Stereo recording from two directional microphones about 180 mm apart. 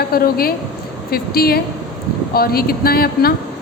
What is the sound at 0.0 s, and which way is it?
A woman's voice, 55° left (ahead or behind).